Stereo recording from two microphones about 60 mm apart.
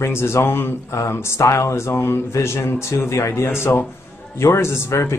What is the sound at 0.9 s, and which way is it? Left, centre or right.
A man's voice, left.